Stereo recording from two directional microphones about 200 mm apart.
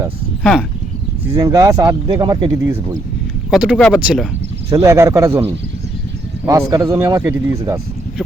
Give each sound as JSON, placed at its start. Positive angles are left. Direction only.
{"t": 1.3, "sound": "speech", "side_deg": -15}
{"t": 3.5, "sound": "speech", "side_deg": 0}
{"t": 4.7, "sound": "speech", "side_deg": -15}